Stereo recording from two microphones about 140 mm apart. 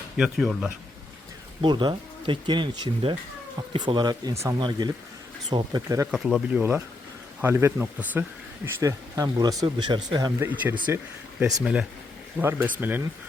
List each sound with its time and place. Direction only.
0.2 s speech: centre (ahead or behind)
1.6 s speech: 35° right (ahead or behind)
6.1 s speech: centre (ahead or behind)
6.6 s speech: 15° right (ahead or behind); by 10.3 s 30° right (ahead or behind)
10.4 s speech: 15° right (ahead or behind)
11.5 s speech: 5° right (ahead or behind)
12.4 s speech: 15° right (ahead or behind)